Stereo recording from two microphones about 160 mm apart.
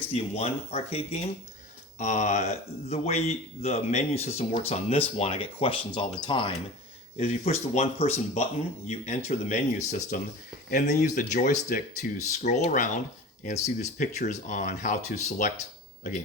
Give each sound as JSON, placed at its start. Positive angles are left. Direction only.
{"t": 0.1, "sound": "speech", "side_deg": 40}
{"t": 7.2, "sound": "speech", "side_deg": 40}